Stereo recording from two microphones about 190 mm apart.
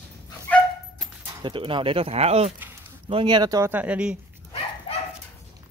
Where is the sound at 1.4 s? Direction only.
25° right (ahead or behind); by 4.2 s 5° right (ahead or behind).